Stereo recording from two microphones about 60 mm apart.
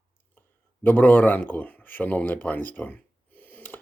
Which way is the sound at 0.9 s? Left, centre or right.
Left.